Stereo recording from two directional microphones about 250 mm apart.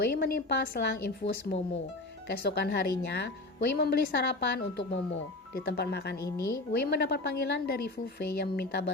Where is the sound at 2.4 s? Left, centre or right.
Left.